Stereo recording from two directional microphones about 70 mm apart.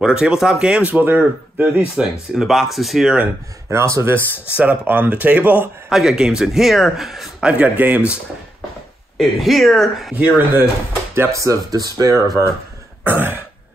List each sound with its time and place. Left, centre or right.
0.0 s speech: centre
0.8 s speech: right
2.4 s a man's voice: centre
3.7 s speech: right
4.6 s speech: right
5.9 s a man's voice: centre
7.4 s speech: centre
9.2 s a man's voice: centre
10.1 s speech: right
11.3 s speech: right
13.0 s speech: right